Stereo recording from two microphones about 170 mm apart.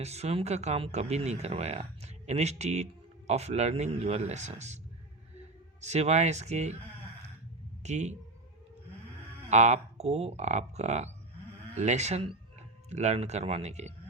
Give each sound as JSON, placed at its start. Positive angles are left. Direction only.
{"t": 0.0, "sound": "speech", "side_deg": -40}
{"t": 5.8, "sound": "speech", "side_deg": -40}
{"t": 7.8, "sound": "speech", "side_deg": -40}
{"t": 9.5, "sound": "speech", "side_deg": -40}